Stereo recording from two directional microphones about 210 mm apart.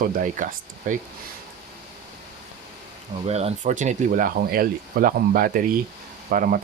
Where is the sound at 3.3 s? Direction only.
30° right (ahead or behind).